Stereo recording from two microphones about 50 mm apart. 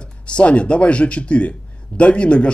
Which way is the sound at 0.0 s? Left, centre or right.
Left.